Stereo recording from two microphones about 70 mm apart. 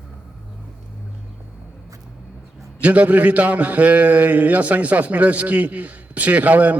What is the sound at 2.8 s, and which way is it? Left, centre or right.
A man's voice, right.